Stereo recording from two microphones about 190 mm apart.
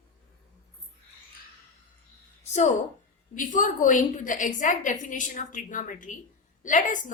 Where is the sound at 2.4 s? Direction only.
35° left (ahead or behind).